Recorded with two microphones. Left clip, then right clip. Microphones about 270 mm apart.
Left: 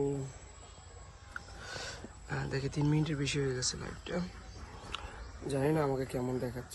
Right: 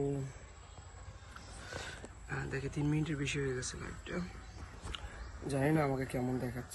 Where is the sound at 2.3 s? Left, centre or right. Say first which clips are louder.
Left 3 dB; centre.